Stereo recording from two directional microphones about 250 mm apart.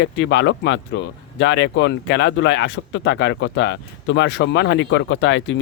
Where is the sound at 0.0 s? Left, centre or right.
Left.